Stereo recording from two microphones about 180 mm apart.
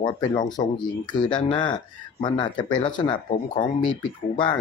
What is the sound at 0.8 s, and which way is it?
Speech, 25° left (ahead or behind).